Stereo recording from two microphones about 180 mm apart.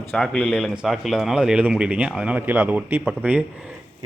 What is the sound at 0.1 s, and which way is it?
Speech, centre (ahead or behind).